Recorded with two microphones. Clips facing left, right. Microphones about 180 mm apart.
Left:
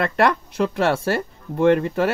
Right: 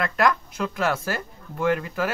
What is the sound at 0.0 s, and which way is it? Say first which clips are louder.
Speech: left 3 dB; 30° left (ahead or behind).